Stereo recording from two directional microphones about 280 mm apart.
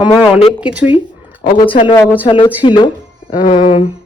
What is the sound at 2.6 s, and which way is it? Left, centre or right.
Speech, centre.